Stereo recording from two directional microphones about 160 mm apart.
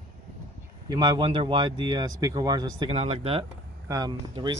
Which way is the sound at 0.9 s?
30° right (ahead or behind).